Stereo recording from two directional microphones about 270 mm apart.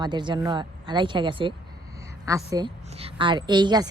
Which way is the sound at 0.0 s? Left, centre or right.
Centre.